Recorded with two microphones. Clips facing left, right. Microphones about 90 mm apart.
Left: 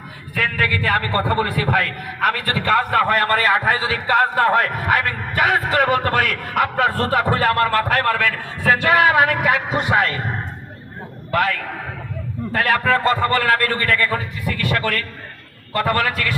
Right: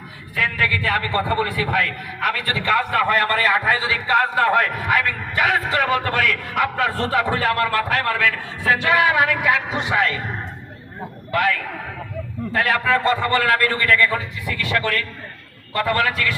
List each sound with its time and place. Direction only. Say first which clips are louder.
0.3 s a man's voice: left 1 dB; 45° left (ahead or behind)
11.3 s a man's voice: left 1 dB; 45° left (ahead or behind)